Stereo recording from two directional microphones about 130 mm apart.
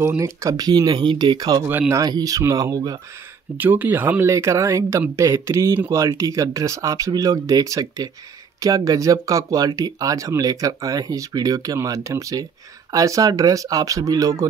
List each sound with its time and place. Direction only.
0.0 s speech: 20° right (ahead or behind)
1.7 s speech: 15° right (ahead or behind)
2.0 s speech: 30° right (ahead or behind)
3.5 s speech: 15° right (ahead or behind)